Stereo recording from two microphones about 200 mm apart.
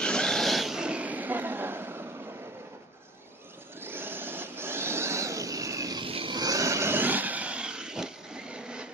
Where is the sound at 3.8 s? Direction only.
10° right (ahead or behind).